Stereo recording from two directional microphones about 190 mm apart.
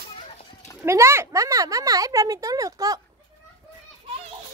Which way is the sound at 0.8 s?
15° right (ahead or behind).